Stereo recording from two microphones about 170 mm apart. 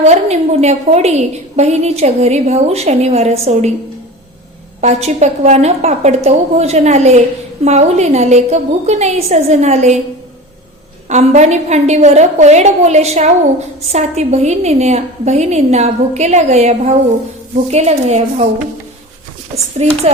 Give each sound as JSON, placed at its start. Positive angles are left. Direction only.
{"t": 0.0, "sound": "a woman's voice", "side_deg": -40}
{"t": 4.8, "sound": "a woman's voice", "side_deg": -40}
{"t": 11.1, "sound": "a woman's voice", "side_deg": -40}
{"t": 19.8, "sound": "a woman's voice", "side_deg": -40}